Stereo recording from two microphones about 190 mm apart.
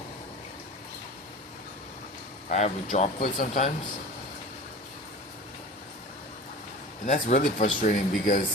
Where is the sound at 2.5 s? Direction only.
40° left (ahead or behind).